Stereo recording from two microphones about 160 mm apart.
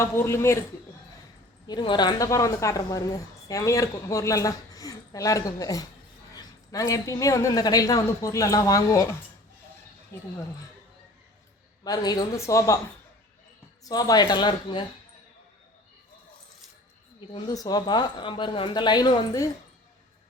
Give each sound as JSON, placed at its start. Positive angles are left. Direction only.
{"t": 0.0, "sound": "speech", "side_deg": 15}
{"t": 1.6, "sound": "speech", "side_deg": 25}
{"t": 11.8, "sound": "speech", "side_deg": 25}
{"t": 13.8, "sound": "speech", "side_deg": 25}
{"t": 17.5, "sound": "speech", "side_deg": 25}